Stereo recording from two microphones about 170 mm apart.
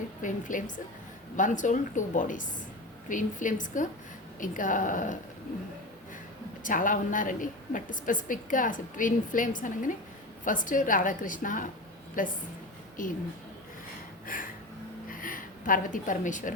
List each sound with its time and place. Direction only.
0.2 s a woman's voice: 50° left (ahead or behind)
6.6 s a woman's voice: 50° left (ahead or behind)
14.3 s a woman's voice: 55° left (ahead or behind)
15.1 s a sound: 55° left (ahead or behind)